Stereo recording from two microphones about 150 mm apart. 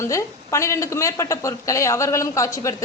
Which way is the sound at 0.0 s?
20° left (ahead or behind).